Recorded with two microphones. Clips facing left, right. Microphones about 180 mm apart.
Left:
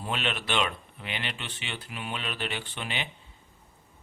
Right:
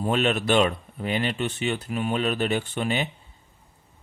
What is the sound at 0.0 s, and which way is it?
Speech, 45° right (ahead or behind).